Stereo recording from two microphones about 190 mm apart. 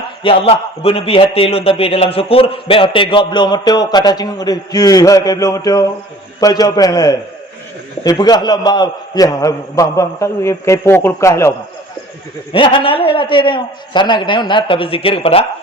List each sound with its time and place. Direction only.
0.2 s a man's voice: 30° left (ahead or behind)
12.5 s a man's voice: 25° left (ahead or behind)